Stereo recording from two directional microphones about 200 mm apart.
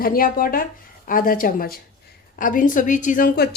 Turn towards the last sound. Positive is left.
turn(degrees=40)  # may be behind; listen again after turning